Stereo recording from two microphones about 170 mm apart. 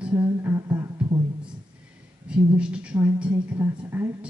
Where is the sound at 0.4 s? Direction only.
20° right (ahead or behind).